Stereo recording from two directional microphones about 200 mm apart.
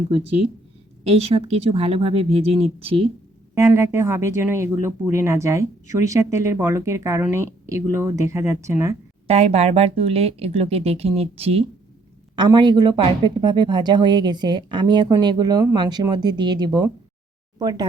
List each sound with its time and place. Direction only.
0.2 s speech: 30° right (ahead or behind)
3.5 s speech: 15° right (ahead or behind)
9.2 s speech: 30° right (ahead or behind)